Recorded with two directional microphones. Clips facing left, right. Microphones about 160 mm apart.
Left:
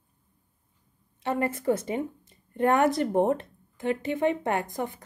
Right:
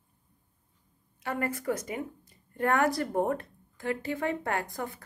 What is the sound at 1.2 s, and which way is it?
A woman's voice, 25° left (ahead or behind).